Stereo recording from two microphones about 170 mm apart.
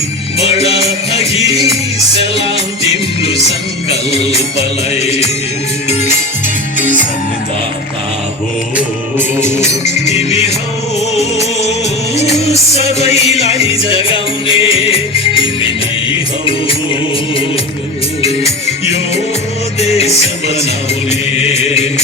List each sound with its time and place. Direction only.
0.4 s music: 35° left (ahead or behind)
1.4 s music: 20° right (ahead or behind)
2.3 s music: 35° left (ahead or behind)
5.9 s music: 40° left (ahead or behind)
8.7 s music: 15° right (ahead or behind)
9.6 s music: 40° left (ahead or behind)
16.5 s music: 30° left (ahead or behind)